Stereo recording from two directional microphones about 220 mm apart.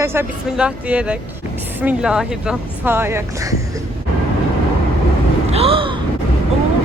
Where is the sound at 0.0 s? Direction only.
10° right (ahead or behind).